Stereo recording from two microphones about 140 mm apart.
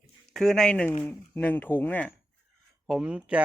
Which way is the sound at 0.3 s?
5° left (ahead or behind).